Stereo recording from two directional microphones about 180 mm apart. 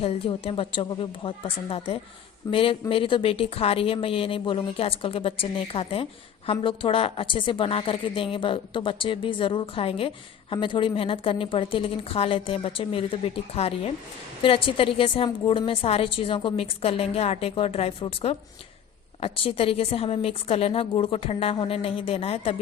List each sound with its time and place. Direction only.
0.0 s a woman's voice: 30° left (ahead or behind)